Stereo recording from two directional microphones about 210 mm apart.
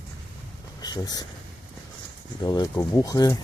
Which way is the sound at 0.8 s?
20° left (ahead or behind).